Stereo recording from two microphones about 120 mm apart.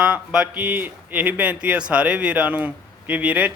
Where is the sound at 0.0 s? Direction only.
10° right (ahead or behind).